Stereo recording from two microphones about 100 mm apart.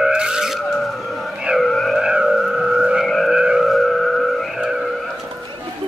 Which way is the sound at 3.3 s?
10° right (ahead or behind).